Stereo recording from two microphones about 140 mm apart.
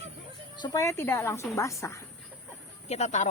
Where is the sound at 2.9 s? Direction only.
55° left (ahead or behind).